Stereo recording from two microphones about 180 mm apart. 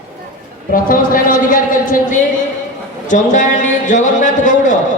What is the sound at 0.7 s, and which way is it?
A man's voice, 50° left (ahead or behind).